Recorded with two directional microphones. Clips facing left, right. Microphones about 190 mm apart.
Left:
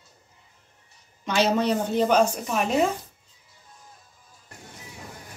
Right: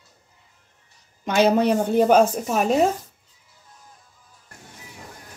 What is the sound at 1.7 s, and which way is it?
Speech, 50° right (ahead or behind).